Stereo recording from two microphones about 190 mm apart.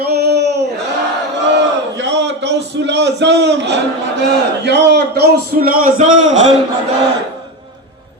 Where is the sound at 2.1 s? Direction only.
65° right (ahead or behind).